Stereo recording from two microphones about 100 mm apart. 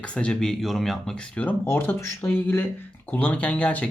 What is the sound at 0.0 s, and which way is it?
Speech, 10° left (ahead or behind).